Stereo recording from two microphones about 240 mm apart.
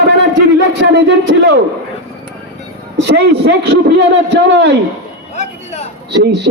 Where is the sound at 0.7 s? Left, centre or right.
Right.